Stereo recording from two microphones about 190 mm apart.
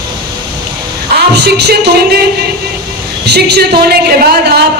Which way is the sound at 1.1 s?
60° right (ahead or behind).